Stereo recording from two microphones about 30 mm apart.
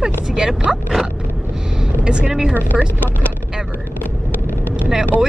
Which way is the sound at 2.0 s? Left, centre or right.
Right.